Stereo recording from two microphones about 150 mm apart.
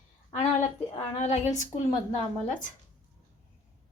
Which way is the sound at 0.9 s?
45° left (ahead or behind).